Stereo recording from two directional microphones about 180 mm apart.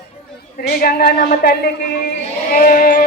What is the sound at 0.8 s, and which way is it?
Speech, 55° left (ahead or behind).